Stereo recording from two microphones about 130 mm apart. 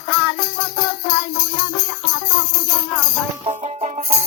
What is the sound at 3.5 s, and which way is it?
Music, 60° right (ahead or behind).